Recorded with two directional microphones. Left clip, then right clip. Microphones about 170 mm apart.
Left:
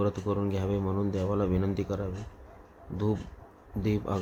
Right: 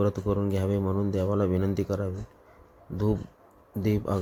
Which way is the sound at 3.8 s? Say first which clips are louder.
Right 3 dB; 20° right (ahead or behind).